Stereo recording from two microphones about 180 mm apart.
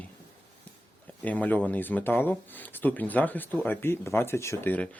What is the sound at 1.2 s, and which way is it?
Speech, 10° left (ahead or behind).